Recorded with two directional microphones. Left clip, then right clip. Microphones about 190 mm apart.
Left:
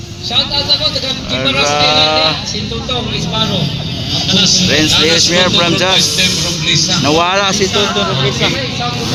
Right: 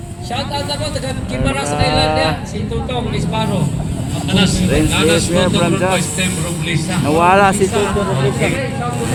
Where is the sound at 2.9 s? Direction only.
40° left (ahead or behind).